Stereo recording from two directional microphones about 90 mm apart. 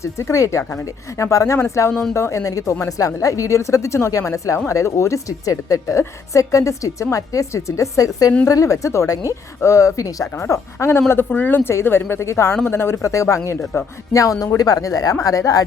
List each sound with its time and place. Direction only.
0.0 s a woman's voice: 35° left (ahead or behind)
11.1 s a woman's voice: 20° left (ahead or behind); by 15.6 s 40° left (ahead or behind)